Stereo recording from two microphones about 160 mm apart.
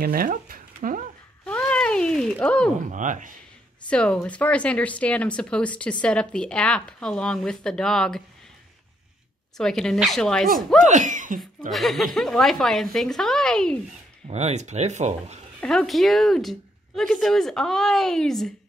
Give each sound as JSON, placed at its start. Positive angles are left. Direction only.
{"t": 0.0, "sound": "speech", "side_deg": -65}
{"t": 1.4, "sound": "a sound", "side_deg": 5}
{"t": 2.9, "sound": "speech", "side_deg": -50}
{"t": 3.9, "sound": "speech", "side_deg": 5}
{"t": 9.6, "sound": "speech", "side_deg": 5}
{"t": 10.8, "sound": "speech", "side_deg": -50}
{"t": 11.7, "sound": "speech", "side_deg": 0}
{"t": 14.2, "sound": "speech", "side_deg": -45}
{"t": 15.6, "sound": "speech", "side_deg": 5}